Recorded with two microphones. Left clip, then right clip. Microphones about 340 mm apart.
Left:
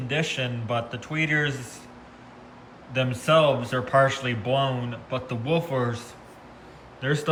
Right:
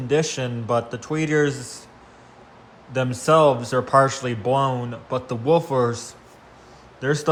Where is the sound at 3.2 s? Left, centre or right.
Centre.